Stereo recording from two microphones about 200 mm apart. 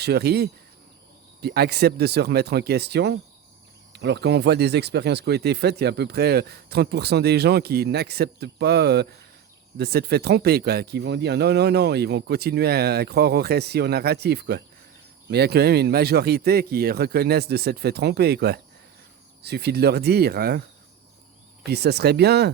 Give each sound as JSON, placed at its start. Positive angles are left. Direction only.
{"t": 0.0, "sound": "speech", "side_deg": -55}
{"t": 21.6, "sound": "speech", "side_deg": -55}